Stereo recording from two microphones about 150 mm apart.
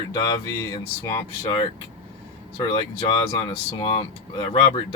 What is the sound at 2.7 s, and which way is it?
Speech, 30° left (ahead or behind).